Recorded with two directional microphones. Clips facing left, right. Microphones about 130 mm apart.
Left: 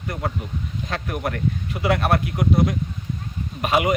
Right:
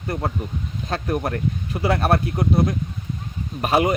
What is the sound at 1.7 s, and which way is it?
Speech, 30° right (ahead or behind).